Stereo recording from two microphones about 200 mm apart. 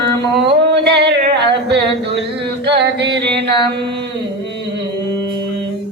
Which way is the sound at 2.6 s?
55° right (ahead or behind).